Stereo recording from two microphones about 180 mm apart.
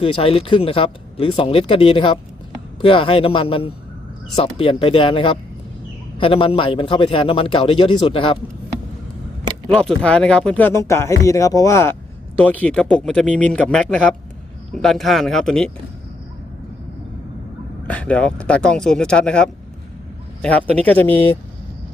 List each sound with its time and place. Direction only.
0.0 s a man's voice: 30° left (ahead or behind)
9.6 s speech: 5° left (ahead or behind)
17.8 s speech: 5° left (ahead or behind)